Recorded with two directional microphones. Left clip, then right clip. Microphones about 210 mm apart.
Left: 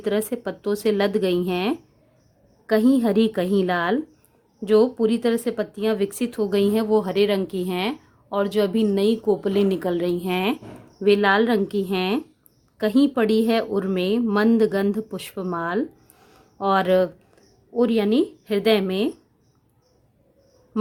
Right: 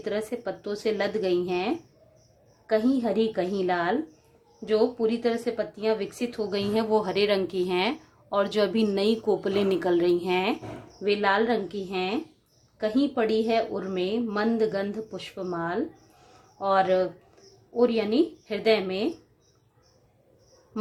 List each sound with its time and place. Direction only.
0.0 s speech: 40° left (ahead or behind)